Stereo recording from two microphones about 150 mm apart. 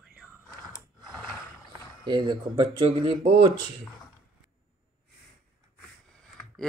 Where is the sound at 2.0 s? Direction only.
30° right (ahead or behind).